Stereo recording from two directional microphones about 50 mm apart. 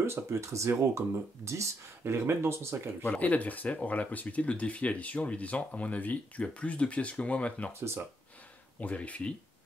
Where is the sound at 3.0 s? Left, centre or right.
Left.